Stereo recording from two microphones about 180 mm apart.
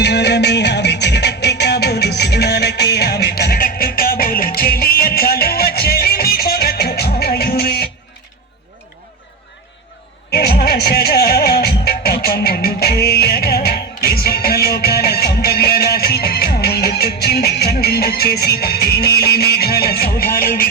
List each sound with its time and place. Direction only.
0.0 s music: 70° left (ahead or behind)
10.3 s music: 55° left (ahead or behind)